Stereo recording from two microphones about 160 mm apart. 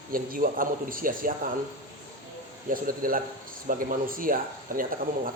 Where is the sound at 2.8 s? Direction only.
60° right (ahead or behind).